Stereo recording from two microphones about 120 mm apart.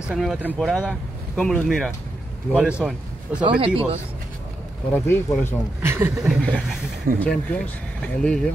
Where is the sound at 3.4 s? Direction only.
45° right (ahead or behind).